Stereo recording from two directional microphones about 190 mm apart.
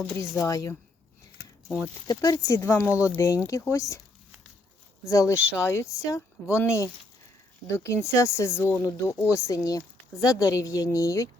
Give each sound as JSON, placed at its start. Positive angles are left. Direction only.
{"t": 0.0, "sound": "speech", "side_deg": 10}
{"t": 1.6, "sound": "speech", "side_deg": 0}
{"t": 2.0, "sound": "speech", "side_deg": 20}
{"t": 5.0, "sound": "speech", "side_deg": 15}